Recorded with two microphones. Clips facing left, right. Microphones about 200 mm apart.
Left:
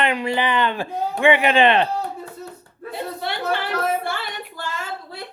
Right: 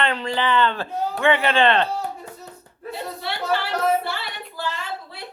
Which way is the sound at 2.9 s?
50° left (ahead or behind).